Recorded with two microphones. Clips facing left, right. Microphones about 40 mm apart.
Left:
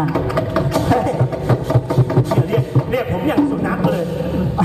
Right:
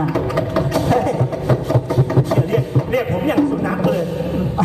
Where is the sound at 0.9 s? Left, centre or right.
Left.